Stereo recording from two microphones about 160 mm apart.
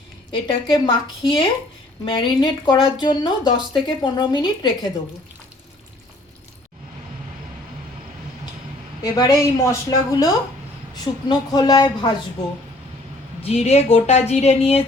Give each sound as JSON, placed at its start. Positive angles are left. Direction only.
{"t": 0.3, "sound": "speech", "side_deg": 30}
{"t": 9.0, "sound": "speech", "side_deg": 25}
{"t": 13.4, "sound": "speech", "side_deg": 40}